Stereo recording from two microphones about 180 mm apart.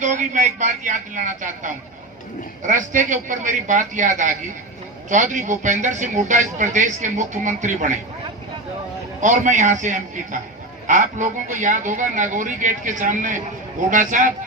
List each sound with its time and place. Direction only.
0.0 s speech: 45° right (ahead or behind)
9.2 s speech: 45° right (ahead or behind)